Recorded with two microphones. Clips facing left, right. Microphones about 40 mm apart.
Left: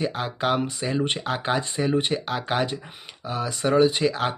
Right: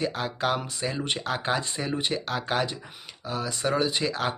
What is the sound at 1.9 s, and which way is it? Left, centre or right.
Speech, left.